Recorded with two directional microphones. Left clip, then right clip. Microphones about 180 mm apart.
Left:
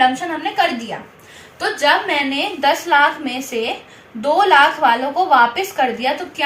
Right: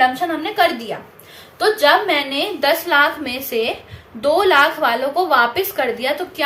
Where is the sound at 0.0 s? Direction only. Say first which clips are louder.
Even; 15° right (ahead or behind).